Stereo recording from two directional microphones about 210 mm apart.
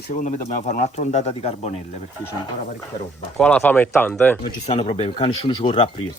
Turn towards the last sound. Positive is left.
turn(degrees=25)  # may be behind; listen again after turning